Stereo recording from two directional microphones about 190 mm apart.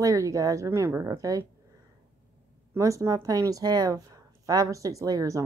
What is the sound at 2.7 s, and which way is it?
Speech, 15° right (ahead or behind).